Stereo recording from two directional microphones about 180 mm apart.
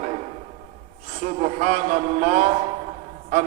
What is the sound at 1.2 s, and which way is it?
A man's voice, 40° right (ahead or behind).